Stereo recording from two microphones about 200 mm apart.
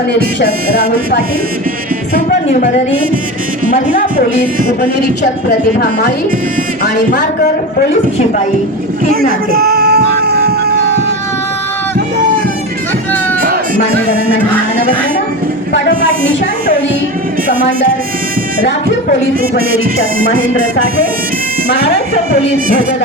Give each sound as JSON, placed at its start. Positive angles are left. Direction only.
{"t": 9.5, "sound": "music", "side_deg": -50}
{"t": 19.4, "sound": "music", "side_deg": -45}